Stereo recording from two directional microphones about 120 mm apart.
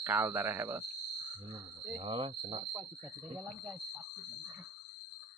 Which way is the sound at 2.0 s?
50° right (ahead or behind).